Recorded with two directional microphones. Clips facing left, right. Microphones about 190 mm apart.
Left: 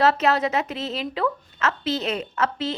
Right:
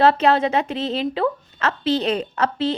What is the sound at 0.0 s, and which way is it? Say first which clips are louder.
A woman's voice: right 4 dB; 30° right (ahead or behind).